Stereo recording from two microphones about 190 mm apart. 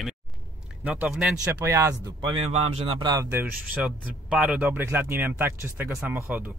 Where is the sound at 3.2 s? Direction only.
10° right (ahead or behind).